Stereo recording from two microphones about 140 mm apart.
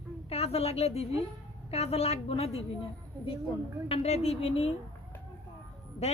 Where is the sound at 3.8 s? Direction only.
45° left (ahead or behind).